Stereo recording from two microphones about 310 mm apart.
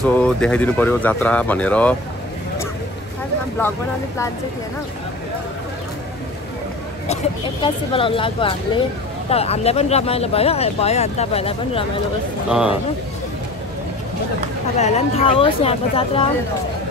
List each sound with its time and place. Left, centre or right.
0.0 s speech: centre
7.6 s speech: centre
12.4 s speech: centre
14.8 s speech: left